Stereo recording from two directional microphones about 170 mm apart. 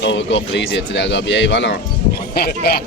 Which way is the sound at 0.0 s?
90° left.